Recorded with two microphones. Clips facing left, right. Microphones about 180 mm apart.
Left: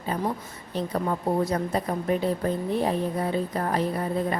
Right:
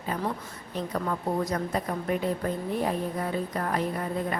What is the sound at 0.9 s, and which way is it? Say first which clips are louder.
A woman's voice: left 3 dB; 30° left (ahead or behind).